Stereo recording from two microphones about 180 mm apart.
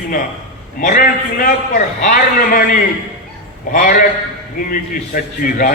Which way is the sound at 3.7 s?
50° left (ahead or behind).